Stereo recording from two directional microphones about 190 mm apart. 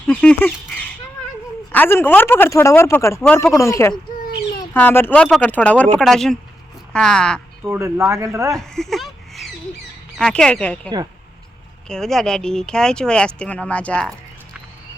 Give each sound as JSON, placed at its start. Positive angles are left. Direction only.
{"t": 0.1, "sound": "goose", "side_deg": 5}
{"t": 1.7, "sound": "speech", "side_deg": 10}
{"t": 7.6, "sound": "speech", "side_deg": -15}
{"t": 8.4, "sound": "a sound", "side_deg": 0}
{"t": 10.2, "sound": "speech", "side_deg": 5}
{"t": 10.8, "sound": "speech", "side_deg": -20}
{"t": 11.9, "sound": "speech", "side_deg": 0}